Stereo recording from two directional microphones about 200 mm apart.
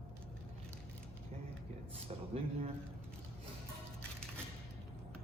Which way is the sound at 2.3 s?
35° right (ahead or behind).